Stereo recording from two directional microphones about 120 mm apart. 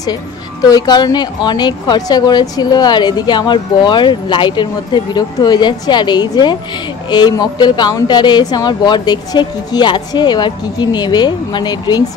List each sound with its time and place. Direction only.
0.7 s speech: 35° left (ahead or behind)